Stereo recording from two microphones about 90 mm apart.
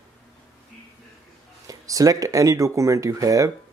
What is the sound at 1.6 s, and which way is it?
Speech, 40° right (ahead or behind).